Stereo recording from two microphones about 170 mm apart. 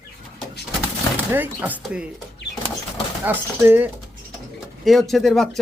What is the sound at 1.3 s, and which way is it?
Speech, 10° right (ahead or behind).